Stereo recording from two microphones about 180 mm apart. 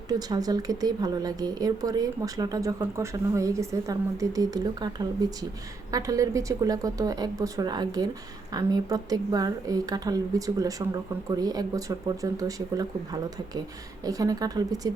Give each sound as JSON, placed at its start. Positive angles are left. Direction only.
{"t": 0.1, "sound": "a woman's voice", "side_deg": -20}
{"t": 14.0, "sound": "a woman's voice", "side_deg": -20}